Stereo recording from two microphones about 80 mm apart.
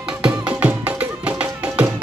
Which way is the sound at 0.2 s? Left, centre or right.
Centre.